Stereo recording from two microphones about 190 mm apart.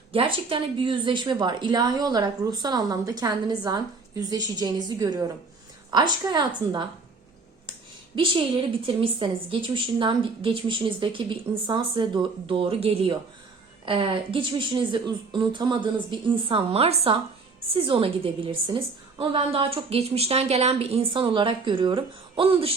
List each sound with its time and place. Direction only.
0.1 s a woman's voice: 30° right (ahead or behind)
7.7 s a woman's voice: 25° right (ahead or behind)